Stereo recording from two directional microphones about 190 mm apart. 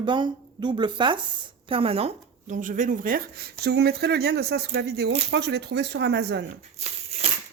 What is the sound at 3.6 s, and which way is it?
Speech, 60° right (ahead or behind).